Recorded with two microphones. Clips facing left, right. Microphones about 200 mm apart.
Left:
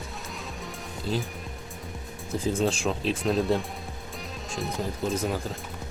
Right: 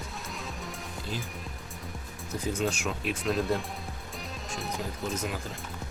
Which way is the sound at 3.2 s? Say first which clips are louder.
Left 2 dB; centre (ahead or behind).